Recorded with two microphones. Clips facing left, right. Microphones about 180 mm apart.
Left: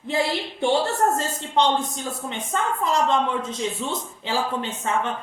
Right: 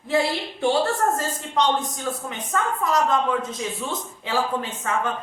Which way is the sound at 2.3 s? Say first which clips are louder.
Left 2 dB; 25° left (ahead or behind).